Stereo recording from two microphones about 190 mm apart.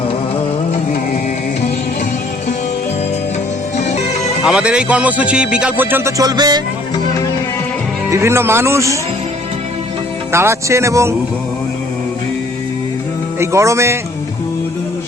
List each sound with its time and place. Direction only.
3.8 s music: 35° left (ahead or behind)
4.4 s speech: 5° right (ahead or behind); by 6.6 s 20° right (ahead or behind)
8.1 s speech: 15° right (ahead or behind)
10.3 s speech: 15° right (ahead or behind)
13.4 s speech: 15° right (ahead or behind)